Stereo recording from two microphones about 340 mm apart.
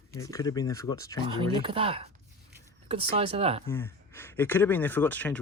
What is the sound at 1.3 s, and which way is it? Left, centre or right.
Speech, centre.